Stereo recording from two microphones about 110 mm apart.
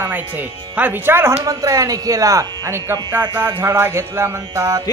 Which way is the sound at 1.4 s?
35° right (ahead or behind).